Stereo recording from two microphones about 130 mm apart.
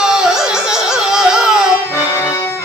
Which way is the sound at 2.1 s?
20° left (ahead or behind).